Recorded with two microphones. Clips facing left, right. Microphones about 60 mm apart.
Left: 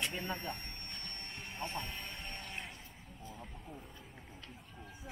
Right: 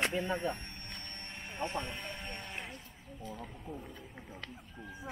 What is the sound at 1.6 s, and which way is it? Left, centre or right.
Speech, centre.